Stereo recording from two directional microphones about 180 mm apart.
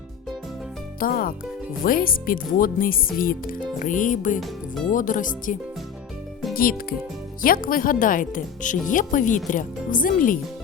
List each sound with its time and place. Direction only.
0.9 s speech: 50° left (ahead or behind)
6.5 s music: 55° left (ahead or behind)
7.4 s speech: 50° left (ahead or behind)